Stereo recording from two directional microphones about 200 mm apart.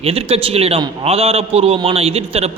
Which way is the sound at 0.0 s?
30° right (ahead or behind).